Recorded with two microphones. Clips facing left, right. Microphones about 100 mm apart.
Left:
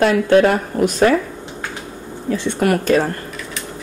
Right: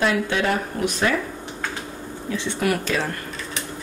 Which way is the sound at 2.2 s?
50° left (ahead or behind).